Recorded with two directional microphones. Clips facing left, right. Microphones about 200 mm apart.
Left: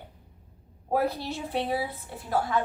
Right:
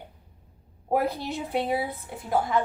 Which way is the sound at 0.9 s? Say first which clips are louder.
Right 1 dB; 15° right (ahead or behind).